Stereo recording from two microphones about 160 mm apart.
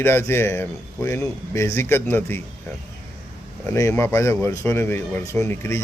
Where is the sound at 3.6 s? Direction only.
15° left (ahead or behind).